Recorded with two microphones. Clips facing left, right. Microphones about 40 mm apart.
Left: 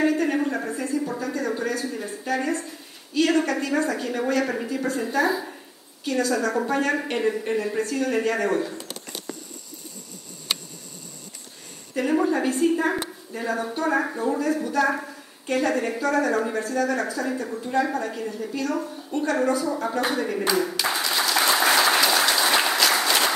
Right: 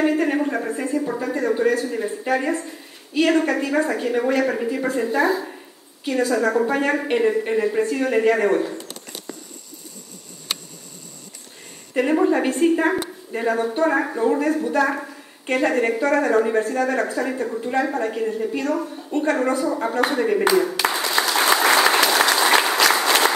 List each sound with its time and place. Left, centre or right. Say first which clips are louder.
0.0 s a sound: right 2 dB; right
0.6 s a woman's voice: right 3 dB; right
5.0 s a woman's voice: right 3 dB; centre
6.0 s a woman's voice: right 4 dB; right
11.9 s a woman's voice: right 4 dB; right
21.0 s applause: right 2 dB; right